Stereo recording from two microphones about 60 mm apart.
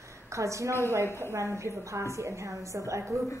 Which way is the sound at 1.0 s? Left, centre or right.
Left.